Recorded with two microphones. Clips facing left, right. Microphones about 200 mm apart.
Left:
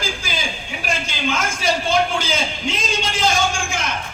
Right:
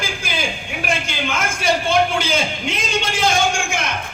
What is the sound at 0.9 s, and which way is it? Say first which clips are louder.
A man's voice: even; 55° right (ahead or behind).